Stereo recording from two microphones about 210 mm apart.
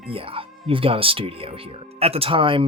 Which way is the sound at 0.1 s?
25° right (ahead or behind).